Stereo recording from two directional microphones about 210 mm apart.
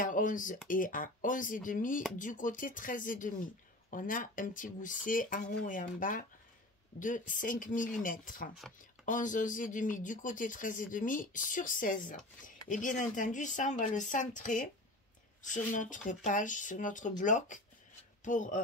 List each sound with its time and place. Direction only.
0.0 s speech: 40° left (ahead or behind)